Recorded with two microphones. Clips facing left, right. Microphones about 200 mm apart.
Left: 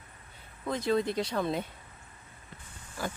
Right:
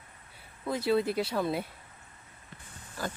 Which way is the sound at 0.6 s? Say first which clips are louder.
Right 1 dB; 5° right (ahead or behind).